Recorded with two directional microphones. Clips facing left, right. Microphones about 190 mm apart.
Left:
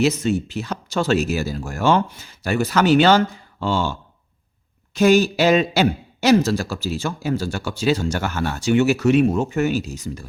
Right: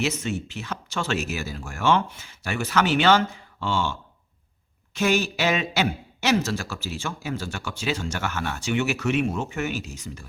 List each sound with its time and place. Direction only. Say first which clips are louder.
0.0 s a man's voice: left 8 dB; 35° left (ahead or behind)
4.9 s a man's voice: left 8 dB; 35° left (ahead or behind)